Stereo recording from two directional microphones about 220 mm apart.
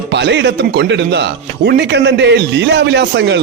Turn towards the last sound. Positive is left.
turn(degrees=-50)  # may be behind; listen again after turning